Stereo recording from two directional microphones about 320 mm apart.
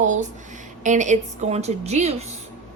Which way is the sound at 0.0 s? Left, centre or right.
Right.